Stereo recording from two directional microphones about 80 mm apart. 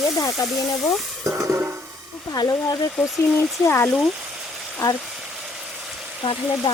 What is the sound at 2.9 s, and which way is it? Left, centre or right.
Speech, left.